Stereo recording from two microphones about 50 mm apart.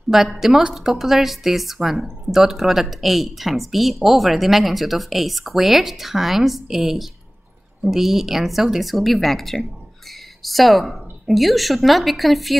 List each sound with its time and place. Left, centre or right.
0.1 s speech: centre